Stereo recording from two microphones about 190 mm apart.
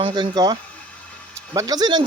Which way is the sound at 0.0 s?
25° right (ahead or behind).